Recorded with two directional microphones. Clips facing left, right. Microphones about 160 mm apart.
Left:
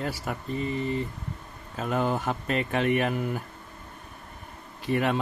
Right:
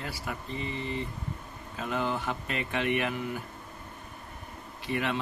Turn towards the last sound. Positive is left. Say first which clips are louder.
# left 5 dB
turn(degrees=45)  # may be behind; listen again after turning